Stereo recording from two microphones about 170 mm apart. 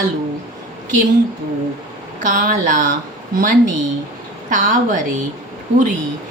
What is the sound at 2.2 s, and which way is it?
Speech, 50° right (ahead or behind).